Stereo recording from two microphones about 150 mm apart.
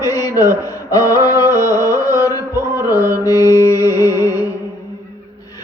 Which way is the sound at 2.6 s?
15° right (ahead or behind).